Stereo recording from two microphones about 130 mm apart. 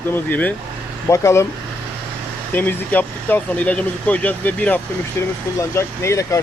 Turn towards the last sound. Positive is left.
turn(degrees=25)  # may be behind; listen again after turning